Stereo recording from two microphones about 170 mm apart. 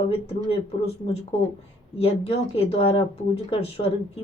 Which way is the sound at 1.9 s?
35° left (ahead or behind).